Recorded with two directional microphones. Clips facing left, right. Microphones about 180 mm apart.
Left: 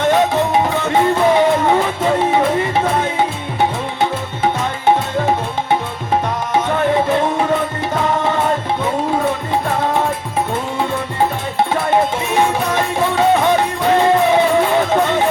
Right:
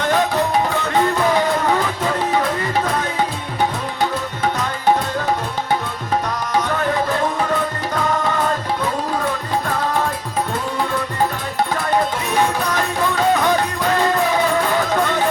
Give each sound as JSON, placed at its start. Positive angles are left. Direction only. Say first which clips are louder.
{"t": 0.0, "sound": "tabla", "louder": "left 4 dB", "side_deg": 25}
{"t": 2.8, "sound": "music", "louder": "left 4 dB", "side_deg": 25}
{"t": 6.5, "sound": "tabla", "louder": "left 4 dB", "side_deg": 25}
{"t": 11.7, "sound": "music", "louder": "left 4 dB", "side_deg": 25}